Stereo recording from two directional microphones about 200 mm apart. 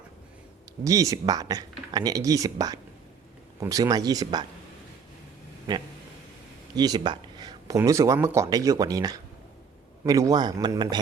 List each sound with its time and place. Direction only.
0.9 s speech: 15° right (ahead or behind)
5.7 s a man's voice: 20° right (ahead or behind)